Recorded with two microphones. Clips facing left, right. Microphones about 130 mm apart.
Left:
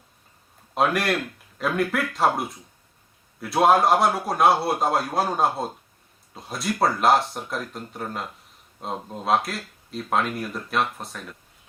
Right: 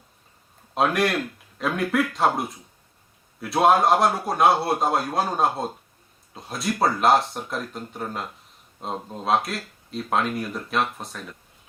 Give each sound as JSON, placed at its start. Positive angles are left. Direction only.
{"t": 0.7, "sound": "speech", "side_deg": 0}